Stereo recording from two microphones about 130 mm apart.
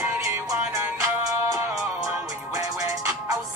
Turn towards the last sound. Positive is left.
turn(degrees=-25)  # may be behind; listen again after turning